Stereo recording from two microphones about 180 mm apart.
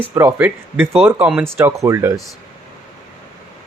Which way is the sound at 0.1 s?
15° right (ahead or behind).